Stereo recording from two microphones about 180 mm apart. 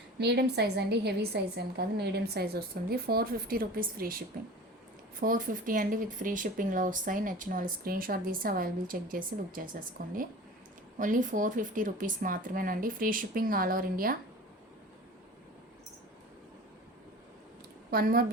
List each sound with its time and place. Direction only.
0.2 s a woman's voice: 65° right (ahead or behind)
5.2 s speech: 50° right (ahead or behind)
17.9 s a woman's voice: 55° right (ahead or behind)